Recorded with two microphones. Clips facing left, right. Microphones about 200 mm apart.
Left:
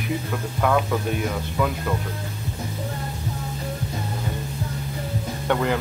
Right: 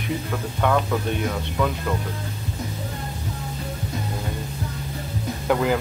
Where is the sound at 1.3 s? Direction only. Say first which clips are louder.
Even; centre (ahead or behind).